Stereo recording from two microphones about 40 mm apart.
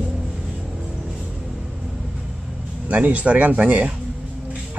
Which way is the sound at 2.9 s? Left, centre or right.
Right.